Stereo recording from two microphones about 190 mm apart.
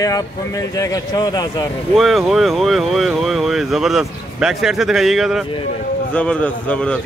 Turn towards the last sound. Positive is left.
turn(degrees=5)  # may be behind; listen again after turning